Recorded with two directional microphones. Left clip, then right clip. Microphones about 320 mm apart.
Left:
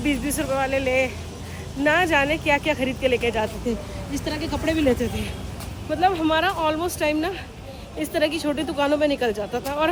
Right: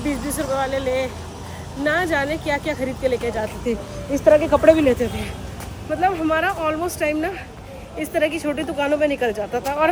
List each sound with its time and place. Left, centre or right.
0.3 s speech: centre
2.3 s speech: left
2.7 s speech: centre